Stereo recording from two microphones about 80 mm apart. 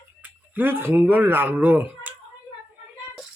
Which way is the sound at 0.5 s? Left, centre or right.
Right.